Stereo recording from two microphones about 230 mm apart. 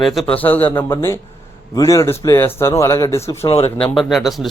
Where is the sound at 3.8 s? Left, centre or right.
Centre.